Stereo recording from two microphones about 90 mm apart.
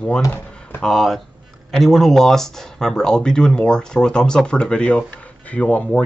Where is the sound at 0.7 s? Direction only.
5° left (ahead or behind).